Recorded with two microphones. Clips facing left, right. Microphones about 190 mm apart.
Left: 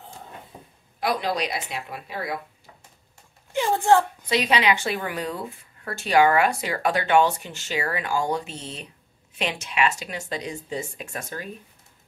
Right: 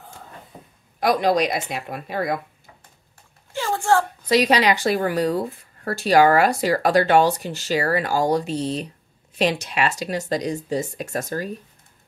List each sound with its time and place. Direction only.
0.9 s a woman's voice: 45° right (ahead or behind)
3.5 s a sound: 20° left (ahead or behind)
4.3 s speech: 40° right (ahead or behind)